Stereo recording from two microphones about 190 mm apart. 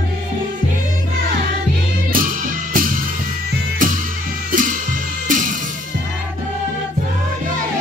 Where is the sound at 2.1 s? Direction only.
45° right (ahead or behind).